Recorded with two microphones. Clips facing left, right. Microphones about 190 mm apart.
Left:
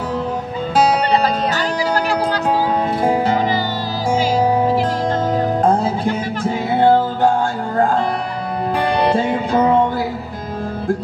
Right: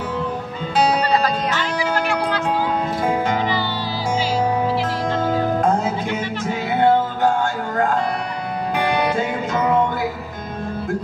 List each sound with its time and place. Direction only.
1.5 s music: 40° left (ahead or behind)
8.7 s music: 30° left (ahead or behind)